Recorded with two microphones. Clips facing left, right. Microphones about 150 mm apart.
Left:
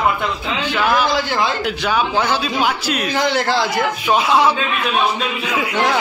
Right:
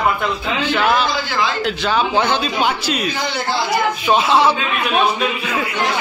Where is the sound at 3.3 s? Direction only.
90° left.